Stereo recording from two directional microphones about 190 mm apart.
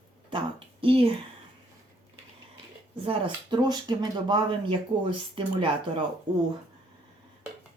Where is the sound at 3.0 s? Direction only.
25° right (ahead or behind).